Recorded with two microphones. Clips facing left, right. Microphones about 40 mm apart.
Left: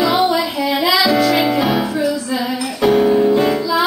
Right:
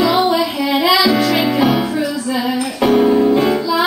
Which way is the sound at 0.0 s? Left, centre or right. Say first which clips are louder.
Right 1 dB; centre.